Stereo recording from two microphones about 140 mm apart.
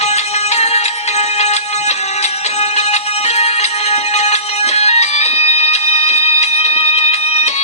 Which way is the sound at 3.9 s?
50° left (ahead or behind).